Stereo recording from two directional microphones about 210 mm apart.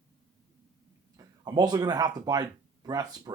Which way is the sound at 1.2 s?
20° right (ahead or behind).